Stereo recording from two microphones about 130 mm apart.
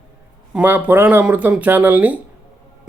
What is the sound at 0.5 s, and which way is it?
A man's voice, 15° right (ahead or behind).